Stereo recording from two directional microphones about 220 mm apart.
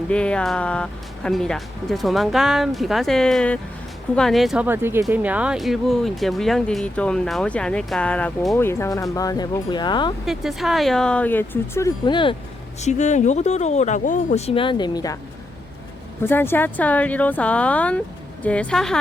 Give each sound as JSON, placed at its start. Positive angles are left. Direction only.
{"t": 0.1, "sound": "speech", "side_deg": 5}
{"t": 10.2, "sound": "speech", "side_deg": 0}
{"t": 12.8, "sound": "speech", "side_deg": 30}
{"t": 16.2, "sound": "speech", "side_deg": 10}